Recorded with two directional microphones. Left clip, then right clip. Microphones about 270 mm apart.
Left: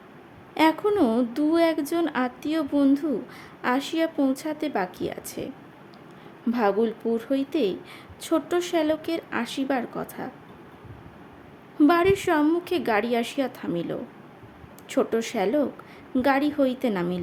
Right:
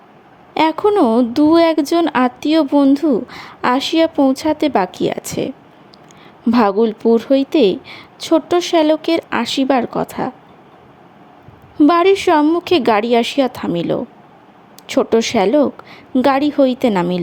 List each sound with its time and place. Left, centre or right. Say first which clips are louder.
0.5 s a woman's voice: right 8 dB; right
11.8 s a woman's voice: right 8 dB; right